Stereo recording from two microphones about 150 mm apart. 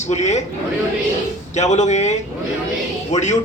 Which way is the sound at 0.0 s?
50° left (ahead or behind).